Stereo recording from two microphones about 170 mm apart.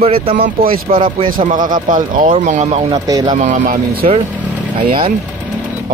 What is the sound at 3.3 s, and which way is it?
Speech, 45° right (ahead or behind).